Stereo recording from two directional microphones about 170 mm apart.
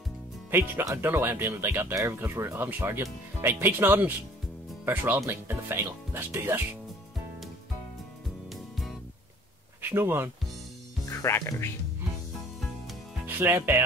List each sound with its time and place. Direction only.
0.5 s speech: 15° right (ahead or behind)
8.5 s music: centre (ahead or behind)
9.8 s speech: 15° right (ahead or behind)
11.1 s music: 15° left (ahead or behind)
13.4 s speech: 15° right (ahead or behind)